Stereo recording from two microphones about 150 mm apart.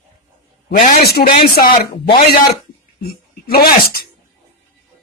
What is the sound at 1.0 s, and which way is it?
Speech, 85° left.